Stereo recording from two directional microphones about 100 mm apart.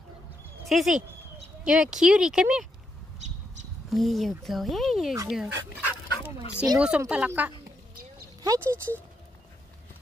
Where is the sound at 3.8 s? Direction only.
Centre (ahead or behind).